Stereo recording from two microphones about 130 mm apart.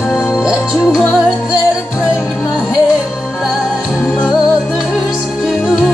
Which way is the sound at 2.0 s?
30° left (ahead or behind).